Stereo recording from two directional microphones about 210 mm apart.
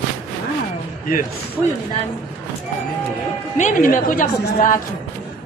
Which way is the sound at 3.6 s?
40° left (ahead or behind).